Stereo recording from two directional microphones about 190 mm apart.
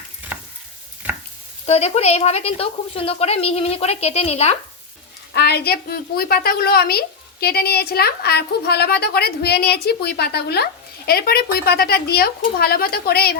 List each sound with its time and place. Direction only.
1.6 s a woman's voice: 35° left (ahead or behind)
5.3 s a woman's voice: 60° left (ahead or behind)